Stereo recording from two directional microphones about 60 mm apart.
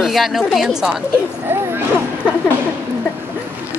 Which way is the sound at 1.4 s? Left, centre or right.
Right.